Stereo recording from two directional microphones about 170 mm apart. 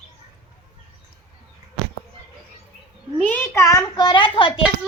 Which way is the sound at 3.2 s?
10° left (ahead or behind).